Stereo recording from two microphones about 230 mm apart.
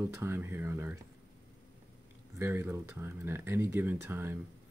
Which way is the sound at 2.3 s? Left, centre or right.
Centre.